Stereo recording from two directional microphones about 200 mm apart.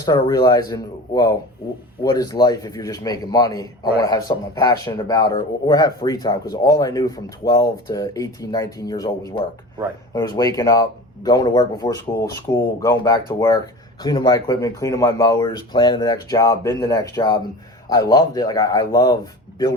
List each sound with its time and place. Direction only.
0.0 s a man's voice: 15° left (ahead or behind)